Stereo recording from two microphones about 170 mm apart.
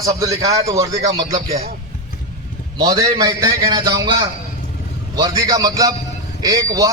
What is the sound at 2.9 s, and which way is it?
Speech, 20° right (ahead or behind).